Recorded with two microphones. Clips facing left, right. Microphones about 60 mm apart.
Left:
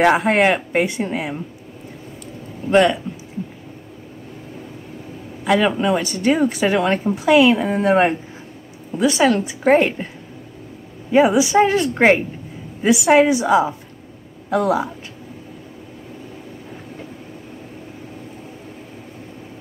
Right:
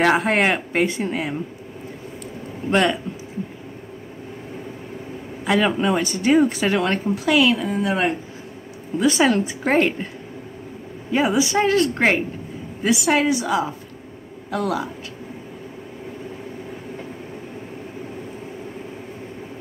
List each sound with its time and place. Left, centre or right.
0.2 s speech: centre
2.7 s speech: centre
5.4 s speech: centre
7.2 s a woman's voice: left
7.6 s speech: left
8.9 s speech: centre
9.2 s a woman's voice: centre
9.7 s speech: centre
11.1 s a woman's voice: centre